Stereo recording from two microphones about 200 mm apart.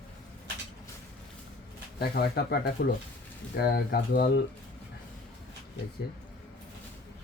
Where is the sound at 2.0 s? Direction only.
50° left (ahead or behind).